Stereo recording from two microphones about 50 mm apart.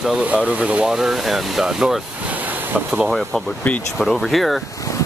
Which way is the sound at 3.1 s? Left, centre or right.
Centre.